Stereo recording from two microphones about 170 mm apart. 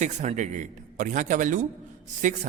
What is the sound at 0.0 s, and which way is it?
A man's voice, 45° right (ahead or behind).